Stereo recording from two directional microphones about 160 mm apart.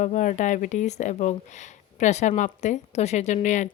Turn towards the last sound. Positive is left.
turn(degrees=50)  # may be behind; listen again after turning